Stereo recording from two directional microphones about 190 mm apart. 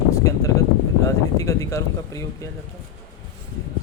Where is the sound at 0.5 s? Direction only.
15° left (ahead or behind).